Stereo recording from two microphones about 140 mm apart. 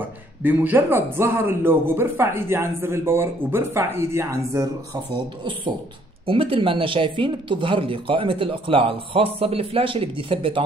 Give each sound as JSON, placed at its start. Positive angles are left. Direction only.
{"t": 0.4, "sound": "speech", "side_deg": -15}
{"t": 6.2, "sound": "speech", "side_deg": -40}